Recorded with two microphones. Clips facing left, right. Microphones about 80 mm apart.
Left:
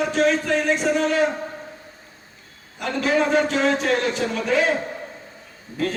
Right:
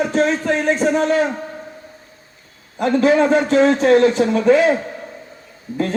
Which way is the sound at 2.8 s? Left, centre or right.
Right.